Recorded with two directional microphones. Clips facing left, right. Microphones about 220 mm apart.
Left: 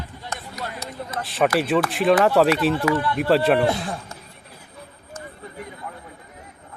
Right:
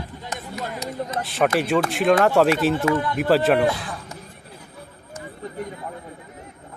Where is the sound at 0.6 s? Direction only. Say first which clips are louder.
Right 5 dB; 15° right (ahead or behind).